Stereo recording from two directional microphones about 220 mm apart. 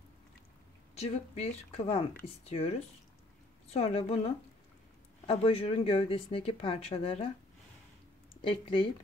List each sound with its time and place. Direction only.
0.9 s speech: 30° left (ahead or behind)
3.7 s speech: 30° left (ahead or behind)
8.4 s speech: 25° left (ahead or behind)